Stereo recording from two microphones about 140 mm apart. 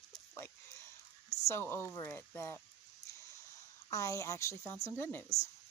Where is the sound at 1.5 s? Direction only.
20° left (ahead or behind).